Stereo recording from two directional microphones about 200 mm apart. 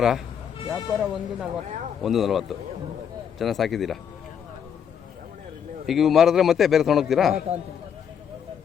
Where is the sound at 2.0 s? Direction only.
Centre (ahead or behind).